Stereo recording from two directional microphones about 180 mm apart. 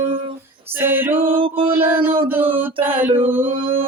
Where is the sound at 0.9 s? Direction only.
10° right (ahead or behind).